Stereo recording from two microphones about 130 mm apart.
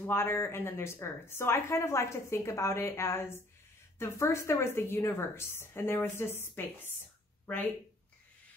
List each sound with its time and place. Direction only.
0.0 s speech: 20° left (ahead or behind)